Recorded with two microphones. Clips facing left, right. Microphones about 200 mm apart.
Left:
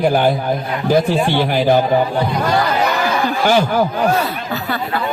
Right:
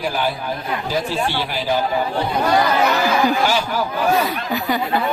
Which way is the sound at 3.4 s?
55° left (ahead or behind).